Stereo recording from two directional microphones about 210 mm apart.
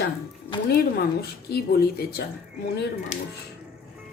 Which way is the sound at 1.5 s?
50° left (ahead or behind).